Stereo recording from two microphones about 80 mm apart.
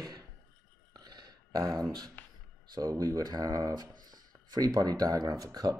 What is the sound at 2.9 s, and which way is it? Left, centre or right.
Speech, right.